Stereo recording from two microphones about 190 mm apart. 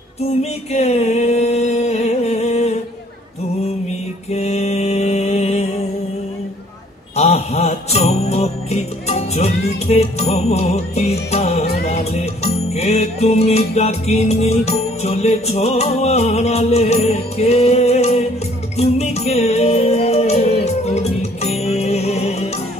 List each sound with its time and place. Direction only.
0.4 s a sound: 35° left (ahead or behind)
4.3 s mantra: 35° left (ahead or behind)
7.2 s music: 35° left (ahead or behind)